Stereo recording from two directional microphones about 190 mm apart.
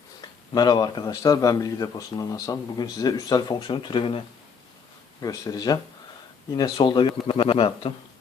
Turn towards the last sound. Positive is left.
turn(degrees=25)  # may be behind; listen again after turning